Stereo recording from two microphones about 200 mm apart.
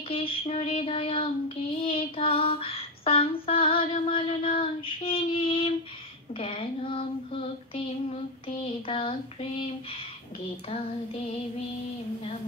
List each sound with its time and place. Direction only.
0.1 s child singing: 25° left (ahead or behind)
8.8 s child singing: 25° left (ahead or behind)